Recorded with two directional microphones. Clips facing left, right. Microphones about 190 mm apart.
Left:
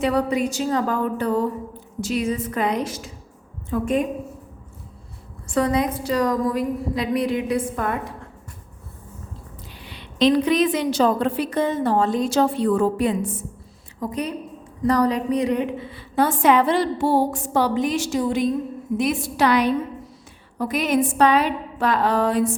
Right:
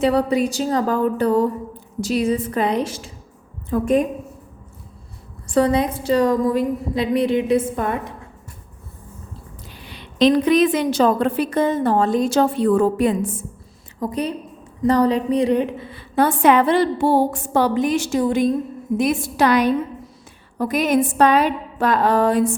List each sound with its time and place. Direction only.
0.0 s a woman's voice: 30° right (ahead or behind)
5.5 s a woman's voice: 30° right (ahead or behind)
10.2 s a woman's voice: 50° right (ahead or behind)
14.0 s a woman's voice: 35° right (ahead or behind)
15.9 s a woman's voice: 55° right (ahead or behind)